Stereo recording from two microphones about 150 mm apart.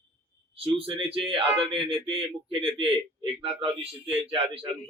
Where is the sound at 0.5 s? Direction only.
40° right (ahead or behind).